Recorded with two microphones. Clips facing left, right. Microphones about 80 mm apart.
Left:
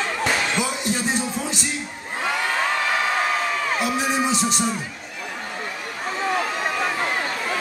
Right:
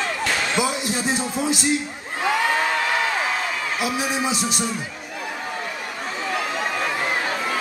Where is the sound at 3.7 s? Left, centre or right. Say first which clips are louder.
Even; centre.